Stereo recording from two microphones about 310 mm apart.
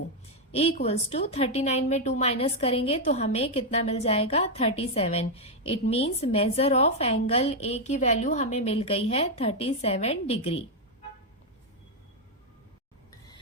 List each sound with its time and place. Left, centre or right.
0.5 s a woman's voice: centre